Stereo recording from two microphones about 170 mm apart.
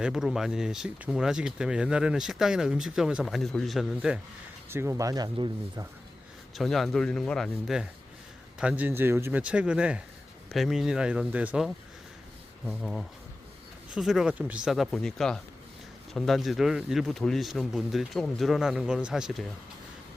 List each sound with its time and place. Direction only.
0.0 s speech: 5° right (ahead or behind)
4.7 s speech: 15° right (ahead or behind)
6.6 s speech: centre (ahead or behind)